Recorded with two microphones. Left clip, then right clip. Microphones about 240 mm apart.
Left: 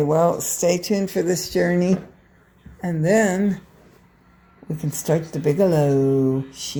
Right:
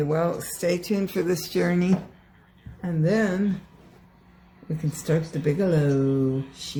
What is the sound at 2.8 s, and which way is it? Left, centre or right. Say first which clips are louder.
Speech: left 6 dB; centre.